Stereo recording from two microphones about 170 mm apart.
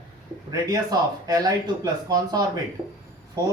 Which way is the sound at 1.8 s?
20° right (ahead or behind).